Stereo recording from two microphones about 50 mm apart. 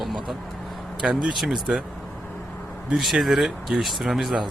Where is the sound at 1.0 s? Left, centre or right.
Centre.